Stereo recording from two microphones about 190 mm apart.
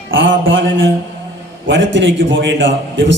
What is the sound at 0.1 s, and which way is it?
A man's voice, 90° right.